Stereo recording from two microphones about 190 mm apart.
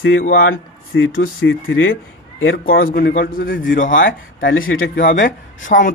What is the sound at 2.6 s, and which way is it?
Speech, 50° left (ahead or behind).